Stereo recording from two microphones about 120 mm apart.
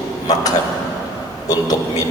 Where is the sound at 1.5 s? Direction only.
30° left (ahead or behind).